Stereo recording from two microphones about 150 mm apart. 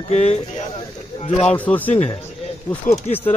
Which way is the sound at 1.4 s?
10° left (ahead or behind).